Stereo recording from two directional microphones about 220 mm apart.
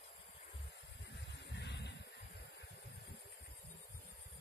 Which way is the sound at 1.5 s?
50° left (ahead or behind).